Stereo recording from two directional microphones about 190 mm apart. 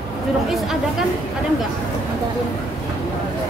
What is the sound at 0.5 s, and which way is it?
Speech, centre (ahead or behind).